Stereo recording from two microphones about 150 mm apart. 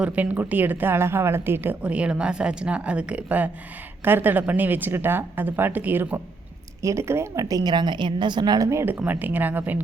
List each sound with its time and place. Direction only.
0.0 s a woman's voice: 10° right (ahead or behind)